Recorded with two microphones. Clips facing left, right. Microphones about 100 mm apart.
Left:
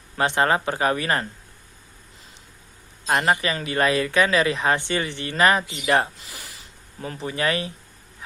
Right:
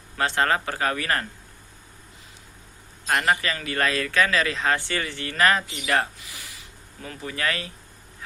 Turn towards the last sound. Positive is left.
turn(degrees=20)  # may be behind; listen again after turning